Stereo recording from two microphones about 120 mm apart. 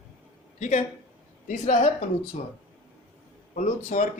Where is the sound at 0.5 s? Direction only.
90° left.